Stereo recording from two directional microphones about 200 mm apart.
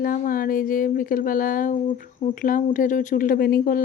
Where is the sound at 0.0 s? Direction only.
45° left (ahead or behind).